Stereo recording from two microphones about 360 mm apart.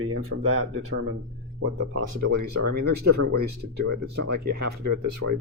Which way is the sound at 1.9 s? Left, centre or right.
Right.